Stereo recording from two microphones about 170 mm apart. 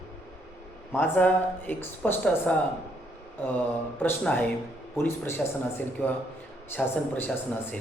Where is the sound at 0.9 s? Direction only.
10° left (ahead or behind).